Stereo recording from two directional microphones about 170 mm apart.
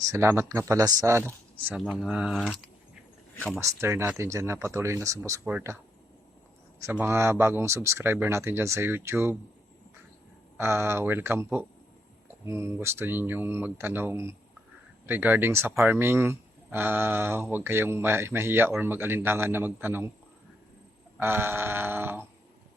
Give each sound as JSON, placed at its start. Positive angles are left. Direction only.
{"t": 0.0, "sound": "speech", "side_deg": -15}
{"t": 1.6, "sound": "speech", "side_deg": -5}
{"t": 3.6, "sound": "speech", "side_deg": -15}
{"t": 7.0, "sound": "speech", "side_deg": -15}
{"t": 10.6, "sound": "speech", "side_deg": -15}
{"t": 12.5, "sound": "speech", "side_deg": -15}
{"t": 21.2, "sound": "speech", "side_deg": -10}